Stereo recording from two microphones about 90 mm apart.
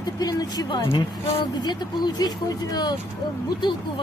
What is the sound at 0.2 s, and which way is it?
Speech, 45° left (ahead or behind).